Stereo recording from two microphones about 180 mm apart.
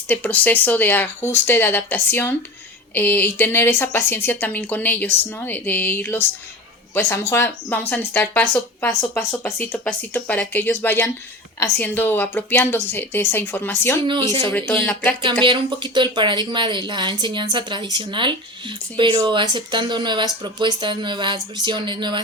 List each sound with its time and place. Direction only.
0.1 s speech: 10° left (ahead or behind)
15.4 s speech: 25° right (ahead or behind)